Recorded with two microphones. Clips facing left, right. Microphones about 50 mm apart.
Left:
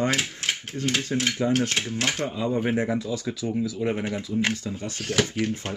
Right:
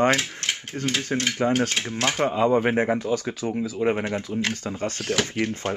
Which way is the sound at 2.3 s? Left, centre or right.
Right.